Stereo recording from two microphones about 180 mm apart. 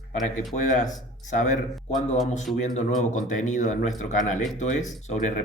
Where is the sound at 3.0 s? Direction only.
45° left (ahead or behind).